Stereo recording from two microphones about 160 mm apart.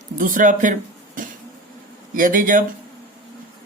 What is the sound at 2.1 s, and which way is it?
Speech, 60° right (ahead or behind).